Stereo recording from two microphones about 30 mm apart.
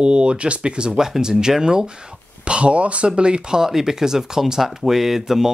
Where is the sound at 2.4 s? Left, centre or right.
Right.